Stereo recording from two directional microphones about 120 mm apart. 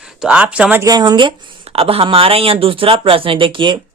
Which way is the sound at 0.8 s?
30° right (ahead or behind).